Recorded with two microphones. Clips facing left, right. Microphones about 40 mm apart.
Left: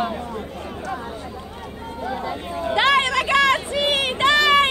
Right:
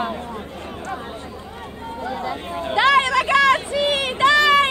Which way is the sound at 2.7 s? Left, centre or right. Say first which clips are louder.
Right 2 dB; left.